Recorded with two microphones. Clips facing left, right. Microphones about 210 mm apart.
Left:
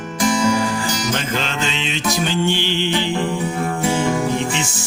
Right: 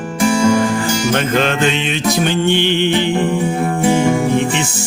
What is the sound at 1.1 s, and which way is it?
Music, 55° right (ahead or behind).